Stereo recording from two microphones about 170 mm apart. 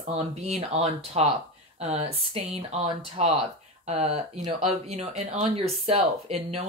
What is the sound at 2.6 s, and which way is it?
Speech, 40° right (ahead or behind).